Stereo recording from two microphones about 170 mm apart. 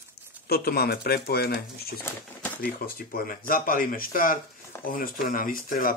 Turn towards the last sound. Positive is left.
turn(degrees=55)  # may be behind; listen again after turning